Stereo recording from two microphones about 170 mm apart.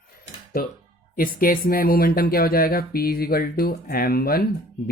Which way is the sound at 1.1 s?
55° left (ahead or behind).